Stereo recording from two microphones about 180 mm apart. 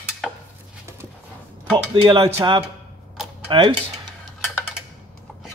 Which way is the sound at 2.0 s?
30° right (ahead or behind).